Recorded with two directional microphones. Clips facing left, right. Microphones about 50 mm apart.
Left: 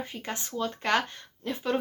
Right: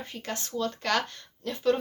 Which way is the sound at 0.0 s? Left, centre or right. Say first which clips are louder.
Even; centre.